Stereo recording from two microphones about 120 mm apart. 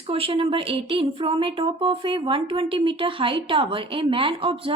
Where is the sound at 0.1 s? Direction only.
50° right (ahead or behind).